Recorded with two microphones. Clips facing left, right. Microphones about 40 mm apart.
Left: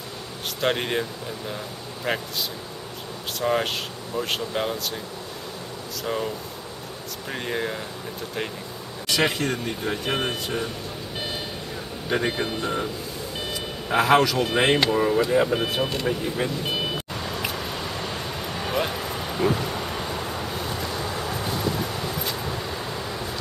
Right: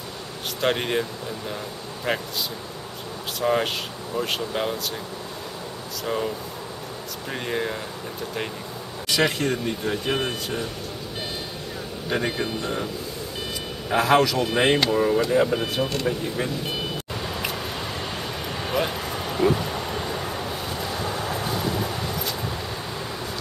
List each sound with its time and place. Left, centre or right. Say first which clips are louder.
0.6 s speech: right 1 dB; centre
2.1 s speech: right 1 dB; centre
3.3 s speech: right 1 dB; centre
6.0 s speech: right 1 dB; centre
7.3 s speech: right 1 dB; centre
9.4 s speech: right 2 dB; centre
12.1 s speech: left 1 dB; centre
13.8 s speech: even; centre
17.2 s vehicle: right 2 dB; centre